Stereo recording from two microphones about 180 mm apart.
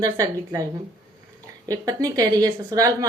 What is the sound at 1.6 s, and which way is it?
Speech, 20° right (ahead or behind).